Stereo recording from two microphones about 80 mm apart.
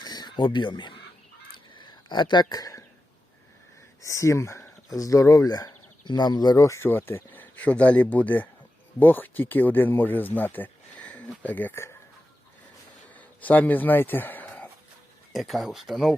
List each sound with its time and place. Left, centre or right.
0.0 s crow: left
1.7 s a sound: left
4.0 s speech: left
6.7 s speech: left
13.1 s speech: left
15.3 s speech: centre